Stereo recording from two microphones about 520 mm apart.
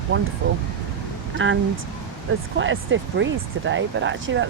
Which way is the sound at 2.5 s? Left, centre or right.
Right.